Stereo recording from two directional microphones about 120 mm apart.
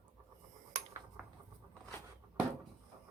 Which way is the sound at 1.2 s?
5° right (ahead or behind).